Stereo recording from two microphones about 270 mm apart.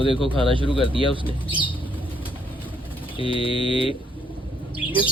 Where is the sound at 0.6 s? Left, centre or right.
Centre.